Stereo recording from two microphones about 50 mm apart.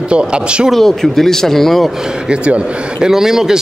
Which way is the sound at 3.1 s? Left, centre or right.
Centre.